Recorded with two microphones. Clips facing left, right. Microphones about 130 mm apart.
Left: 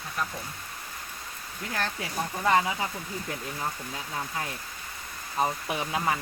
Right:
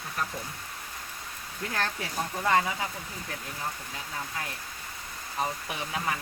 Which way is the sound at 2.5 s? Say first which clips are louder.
Left 2 dB; 20° left (ahead or behind).